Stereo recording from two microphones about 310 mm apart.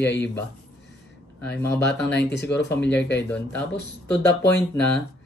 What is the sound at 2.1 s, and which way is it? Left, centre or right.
Speech, left.